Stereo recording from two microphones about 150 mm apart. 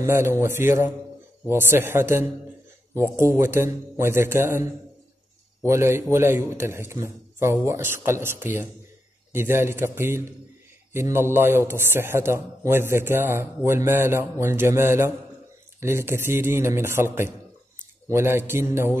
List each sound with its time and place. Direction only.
0.0 s a man's voice: 15° right (ahead or behind)